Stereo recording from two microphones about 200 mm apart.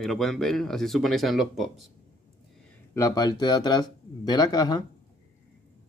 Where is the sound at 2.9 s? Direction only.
20° left (ahead or behind).